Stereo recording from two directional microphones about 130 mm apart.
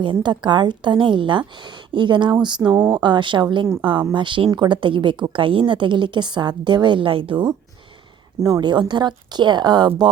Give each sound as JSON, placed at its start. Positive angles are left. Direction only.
{"t": 0.0, "sound": "a woman's voice", "side_deg": -35}
{"t": 8.4, "sound": "a woman's voice", "side_deg": -25}